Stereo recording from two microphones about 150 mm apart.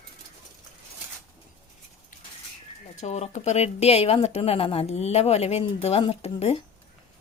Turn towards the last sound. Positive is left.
turn(degrees=40)  # may be behind; listen again after turning